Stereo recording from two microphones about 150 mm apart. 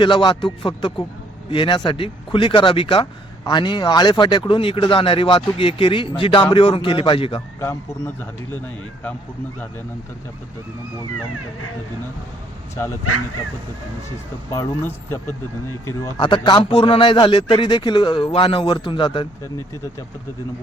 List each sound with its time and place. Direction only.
0.0 s speech: 30° left (ahead or behind)
7.6 s speech: 15° left (ahead or behind)
14.5 s speech: 15° left (ahead or behind)
16.1 s speech: 30° left (ahead or behind)